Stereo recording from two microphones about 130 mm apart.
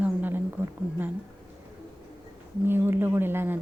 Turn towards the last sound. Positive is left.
turn(degrees=-15)  # may be behind; listen again after turning